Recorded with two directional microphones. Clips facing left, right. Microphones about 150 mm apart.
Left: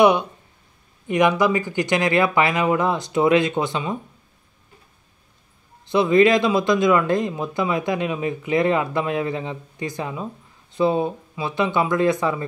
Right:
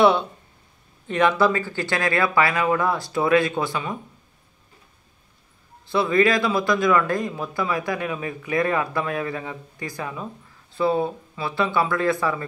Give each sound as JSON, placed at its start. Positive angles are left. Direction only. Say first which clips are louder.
{"t": 0.0, "sound": "a man's voice", "louder": "left 2 dB", "side_deg": 15}
{"t": 5.9, "sound": "a man's voice", "louder": "left 4 dB", "side_deg": 20}